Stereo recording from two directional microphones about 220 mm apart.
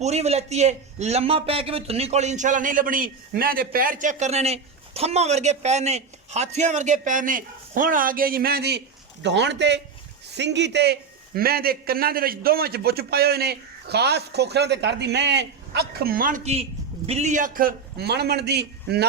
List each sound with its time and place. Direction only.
0.0 s a man's voice: 30° right (ahead or behind); by 19.0 s 50° right (ahead or behind)